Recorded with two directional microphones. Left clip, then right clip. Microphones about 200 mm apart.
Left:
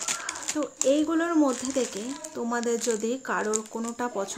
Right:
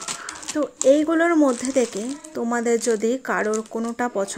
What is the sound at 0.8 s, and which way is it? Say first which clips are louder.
Speech: right 7 dB; 30° right (ahead or behind).